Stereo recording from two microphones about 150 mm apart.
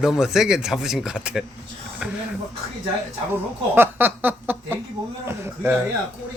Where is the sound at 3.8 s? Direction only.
15° right (ahead or behind).